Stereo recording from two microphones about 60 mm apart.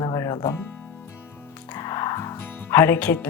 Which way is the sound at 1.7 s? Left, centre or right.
Left.